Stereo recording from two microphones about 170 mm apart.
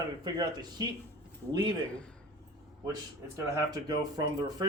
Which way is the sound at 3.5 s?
25° right (ahead or behind).